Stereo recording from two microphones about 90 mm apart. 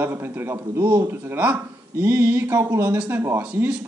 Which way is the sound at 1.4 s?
20° right (ahead or behind).